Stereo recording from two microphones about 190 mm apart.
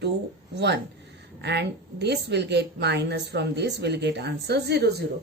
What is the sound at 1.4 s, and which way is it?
A woman's voice, 60° right (ahead or behind).